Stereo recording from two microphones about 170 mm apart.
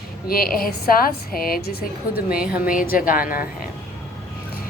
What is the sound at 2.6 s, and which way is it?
Speech, 55° left (ahead or behind).